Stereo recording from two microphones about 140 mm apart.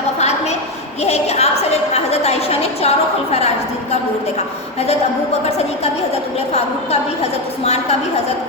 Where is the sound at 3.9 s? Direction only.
50° left (ahead or behind).